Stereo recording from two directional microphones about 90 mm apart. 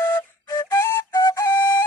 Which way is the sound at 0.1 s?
45° left (ahead or behind).